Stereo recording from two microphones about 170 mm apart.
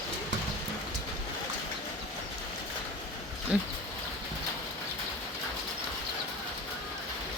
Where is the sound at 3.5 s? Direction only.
5° right (ahead or behind).